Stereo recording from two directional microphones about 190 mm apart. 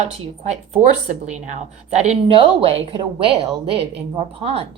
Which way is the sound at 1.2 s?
35° right (ahead or behind).